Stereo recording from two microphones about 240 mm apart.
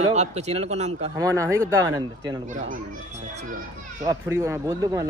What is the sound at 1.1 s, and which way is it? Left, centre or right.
Speech, centre.